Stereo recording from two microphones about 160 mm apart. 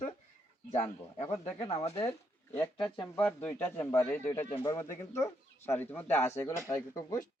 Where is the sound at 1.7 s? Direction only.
40° left (ahead or behind).